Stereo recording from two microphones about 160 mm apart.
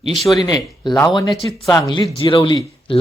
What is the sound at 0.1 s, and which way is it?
Speech, centre (ahead or behind).